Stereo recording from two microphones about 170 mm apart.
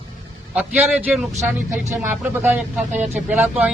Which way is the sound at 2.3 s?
10° right (ahead or behind).